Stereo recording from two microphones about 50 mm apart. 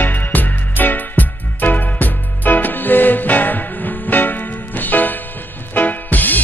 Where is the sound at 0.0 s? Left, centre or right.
Left.